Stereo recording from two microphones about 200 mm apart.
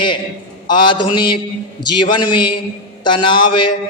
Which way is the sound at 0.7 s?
25° left (ahead or behind).